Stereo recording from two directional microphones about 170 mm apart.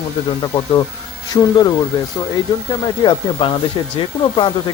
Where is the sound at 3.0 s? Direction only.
25° left (ahead or behind).